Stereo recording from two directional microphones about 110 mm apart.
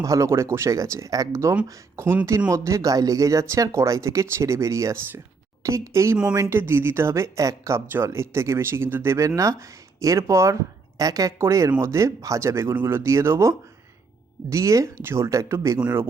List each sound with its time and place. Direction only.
0.0 s speech: 30° right (ahead or behind)